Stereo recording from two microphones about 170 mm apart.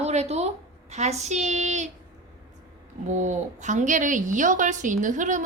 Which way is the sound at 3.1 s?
45° right (ahead or behind).